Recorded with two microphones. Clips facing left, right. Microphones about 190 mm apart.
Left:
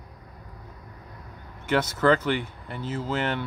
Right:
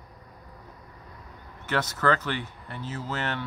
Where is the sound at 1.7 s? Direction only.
10° left (ahead or behind).